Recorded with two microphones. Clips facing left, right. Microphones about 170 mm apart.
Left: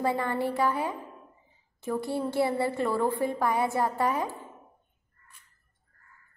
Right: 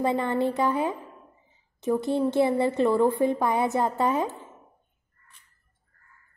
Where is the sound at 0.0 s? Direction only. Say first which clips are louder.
Right 3 dB; 20° right (ahead or behind).